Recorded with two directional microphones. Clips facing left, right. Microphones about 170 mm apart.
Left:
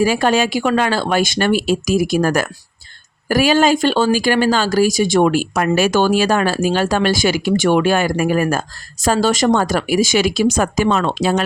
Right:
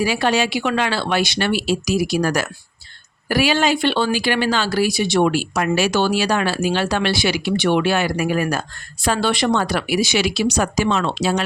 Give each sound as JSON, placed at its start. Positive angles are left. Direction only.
{"t": 0.0, "sound": "speech", "side_deg": 45}